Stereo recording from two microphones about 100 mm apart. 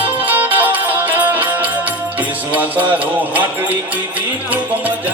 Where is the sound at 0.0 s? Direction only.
15° right (ahead or behind).